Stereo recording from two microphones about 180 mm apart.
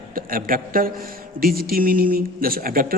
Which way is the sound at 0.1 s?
50° right (ahead or behind).